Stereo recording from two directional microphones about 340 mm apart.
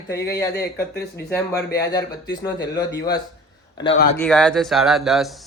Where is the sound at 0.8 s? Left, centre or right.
Left.